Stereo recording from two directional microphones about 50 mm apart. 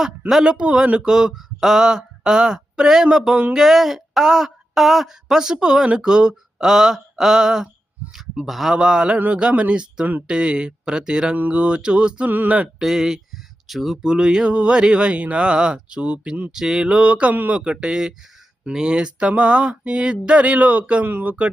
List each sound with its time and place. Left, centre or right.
0.4 s speech: centre
8.7 s speech: centre
9.1 s speech: right
10.2 s speech: centre
11.3 s speech: right
12.3 s speech: right
12.8 s speech: centre; by 17.3 s right
17.3 s speech: right
17.6 s speech: centre
21.0 s speech: right